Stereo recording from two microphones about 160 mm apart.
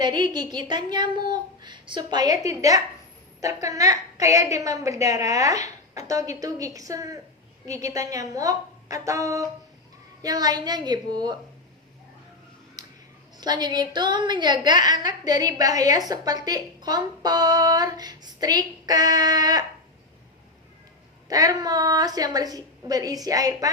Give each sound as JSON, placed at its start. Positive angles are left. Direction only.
{"t": 0.0, "sound": "a woman's voice", "side_deg": -25}
{"t": 13.4, "sound": "a woman's voice", "side_deg": -25}
{"t": 21.2, "sound": "a woman's voice", "side_deg": -25}